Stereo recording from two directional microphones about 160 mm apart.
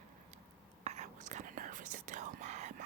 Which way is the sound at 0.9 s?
45° right (ahead or behind).